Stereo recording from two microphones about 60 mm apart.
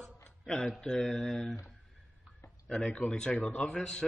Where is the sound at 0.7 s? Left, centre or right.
Centre.